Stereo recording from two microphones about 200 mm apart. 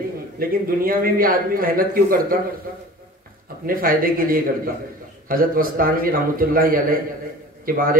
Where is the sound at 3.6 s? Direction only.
45° right (ahead or behind).